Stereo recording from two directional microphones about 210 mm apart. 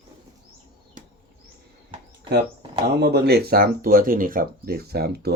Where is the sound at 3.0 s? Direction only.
50° right (ahead or behind).